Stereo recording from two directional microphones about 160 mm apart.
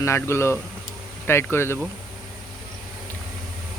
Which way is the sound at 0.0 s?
15° left (ahead or behind).